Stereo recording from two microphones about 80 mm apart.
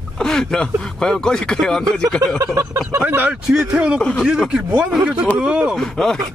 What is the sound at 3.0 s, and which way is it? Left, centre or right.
Speech, right.